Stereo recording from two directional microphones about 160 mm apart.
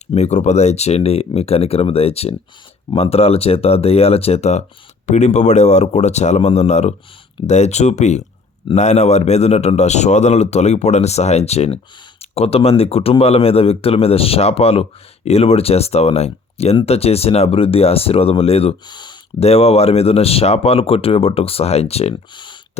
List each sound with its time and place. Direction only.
0.1 s speech: 45° left (ahead or behind); by 19.1 s 25° left (ahead or behind)
19.4 s speech: 40° left (ahead or behind)
22.1 s speech: 30° left (ahead or behind)